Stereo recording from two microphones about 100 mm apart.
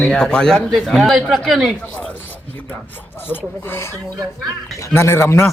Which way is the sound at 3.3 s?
20° left (ahead or behind).